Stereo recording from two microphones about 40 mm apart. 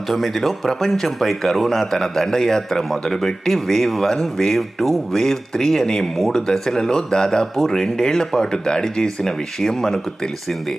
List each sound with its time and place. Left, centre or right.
0.1 s a man's voice: centre